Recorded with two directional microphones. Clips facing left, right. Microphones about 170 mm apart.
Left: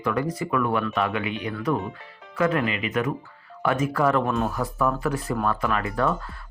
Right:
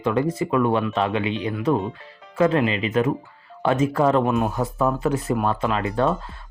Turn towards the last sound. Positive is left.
turn(degrees=-20)  # may be behind; listen again after turning